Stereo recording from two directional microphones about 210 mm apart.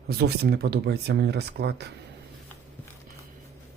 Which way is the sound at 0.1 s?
50° right (ahead or behind).